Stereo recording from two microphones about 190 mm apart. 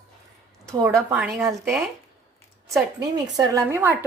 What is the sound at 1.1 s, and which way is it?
Speech, 5° right (ahead or behind).